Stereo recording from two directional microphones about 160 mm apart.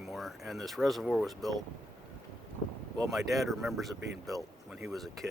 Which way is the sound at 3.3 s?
Centre (ahead or behind).